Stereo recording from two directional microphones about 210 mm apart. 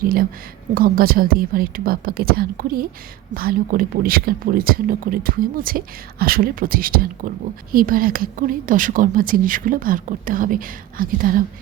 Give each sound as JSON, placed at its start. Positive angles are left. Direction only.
{"t": 0.0, "sound": "speech", "side_deg": -45}